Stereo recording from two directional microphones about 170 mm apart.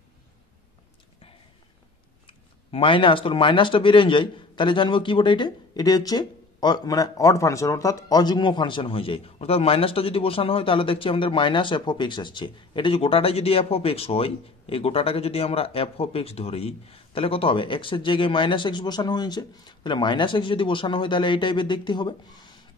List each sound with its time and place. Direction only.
2.2 s speech: 30° left (ahead or behind)